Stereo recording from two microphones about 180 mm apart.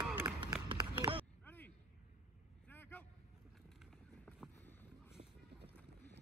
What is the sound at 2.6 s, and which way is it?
Vehicle, 10° left (ahead or behind).